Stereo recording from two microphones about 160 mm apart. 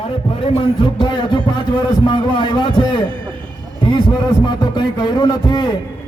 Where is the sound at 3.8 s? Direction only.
30° left (ahead or behind).